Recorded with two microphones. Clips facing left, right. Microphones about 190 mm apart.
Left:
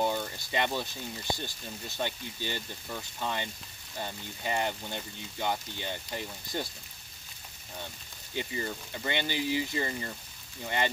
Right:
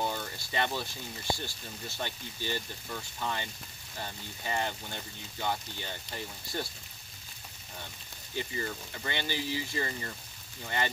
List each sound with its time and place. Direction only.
0.0 s a sound: 15° left (ahead or behind)
1.3 s speech: 20° left (ahead or behind)
8.4 s speech: 20° left (ahead or behind)